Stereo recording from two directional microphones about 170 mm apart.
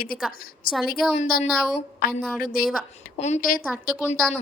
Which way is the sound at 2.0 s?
60° left (ahead or behind).